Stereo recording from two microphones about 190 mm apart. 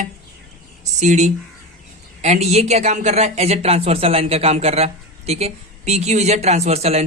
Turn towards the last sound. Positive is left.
turn(degrees=-35)  # may be behind; listen again after turning